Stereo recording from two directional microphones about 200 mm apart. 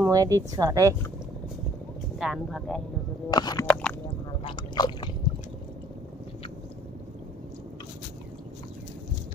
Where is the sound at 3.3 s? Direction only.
20° left (ahead or behind).